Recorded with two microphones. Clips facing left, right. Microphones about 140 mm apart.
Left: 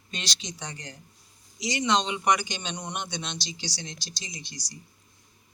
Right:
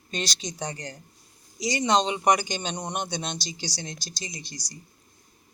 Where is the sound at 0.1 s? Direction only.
45° right (ahead or behind).